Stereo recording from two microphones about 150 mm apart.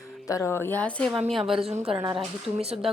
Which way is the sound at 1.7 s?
45° right (ahead or behind).